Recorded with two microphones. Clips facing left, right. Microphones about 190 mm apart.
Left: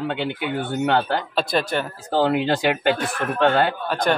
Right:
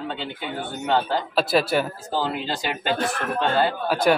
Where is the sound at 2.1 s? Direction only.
65° left (ahead or behind).